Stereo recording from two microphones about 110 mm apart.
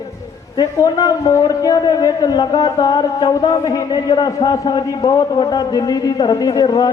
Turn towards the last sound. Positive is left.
turn(degrees=40)  # may be behind; listen again after turning